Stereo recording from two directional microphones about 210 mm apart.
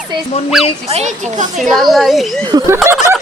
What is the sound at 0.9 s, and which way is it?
Speech, 30° right (ahead or behind).